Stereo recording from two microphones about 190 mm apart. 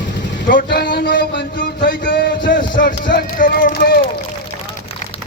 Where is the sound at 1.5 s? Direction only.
45° left (ahead or behind).